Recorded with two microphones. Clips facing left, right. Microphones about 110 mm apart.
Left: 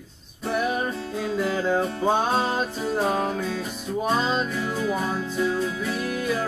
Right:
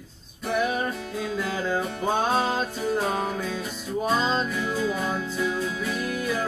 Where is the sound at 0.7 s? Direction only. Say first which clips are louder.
Left 1 dB; 20° left (ahead or behind).